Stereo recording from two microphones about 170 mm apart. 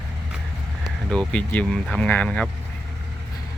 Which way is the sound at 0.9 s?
5° left (ahead or behind).